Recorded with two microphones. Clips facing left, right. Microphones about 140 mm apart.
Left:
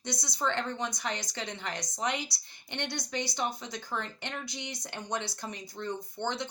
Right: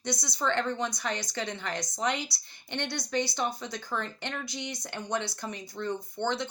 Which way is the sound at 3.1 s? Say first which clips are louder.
Right 5 dB; 20° left (ahead or behind).